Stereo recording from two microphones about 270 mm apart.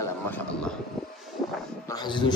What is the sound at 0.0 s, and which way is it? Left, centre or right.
Vehicle, centre.